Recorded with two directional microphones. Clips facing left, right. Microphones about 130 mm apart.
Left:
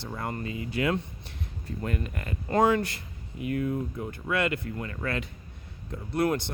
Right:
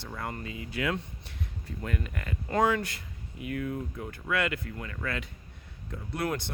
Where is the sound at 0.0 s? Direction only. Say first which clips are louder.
Left 3 dB; 30° left (ahead or behind).